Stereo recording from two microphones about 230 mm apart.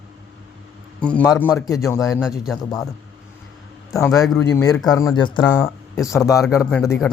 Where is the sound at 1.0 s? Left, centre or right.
Centre.